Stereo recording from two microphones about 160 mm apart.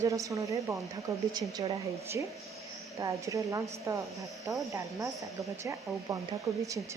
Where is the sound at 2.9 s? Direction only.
20° right (ahead or behind).